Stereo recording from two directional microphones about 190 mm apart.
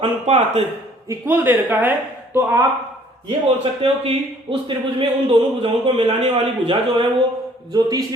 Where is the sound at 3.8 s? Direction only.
30° right (ahead or behind).